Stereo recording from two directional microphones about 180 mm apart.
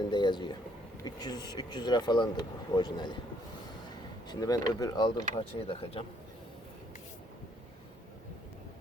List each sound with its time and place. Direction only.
0.1 s speech: 25° left (ahead or behind)
4.3 s speech: 20° left (ahead or behind)